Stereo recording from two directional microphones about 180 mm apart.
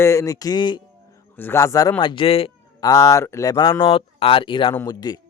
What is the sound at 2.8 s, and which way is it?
Speech, 20° left (ahead or behind).